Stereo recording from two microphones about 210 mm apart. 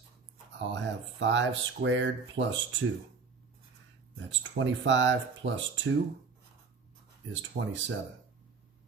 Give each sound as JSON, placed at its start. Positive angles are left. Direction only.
{"t": 0.6, "sound": "speech", "side_deg": -60}
{"t": 4.3, "sound": "speech", "side_deg": -60}
{"t": 7.3, "sound": "speech", "side_deg": -60}